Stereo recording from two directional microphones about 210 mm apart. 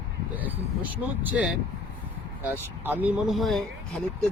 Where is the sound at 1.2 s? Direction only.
5° right (ahead or behind).